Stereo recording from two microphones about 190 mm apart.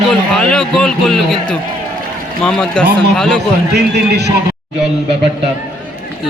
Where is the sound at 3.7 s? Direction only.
60° right (ahead or behind).